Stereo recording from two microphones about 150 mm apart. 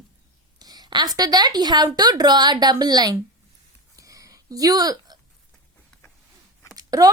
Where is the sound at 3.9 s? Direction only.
20° right (ahead or behind).